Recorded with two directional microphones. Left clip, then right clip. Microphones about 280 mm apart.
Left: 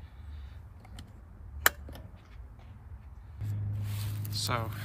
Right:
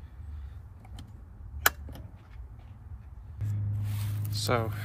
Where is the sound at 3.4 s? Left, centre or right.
Centre.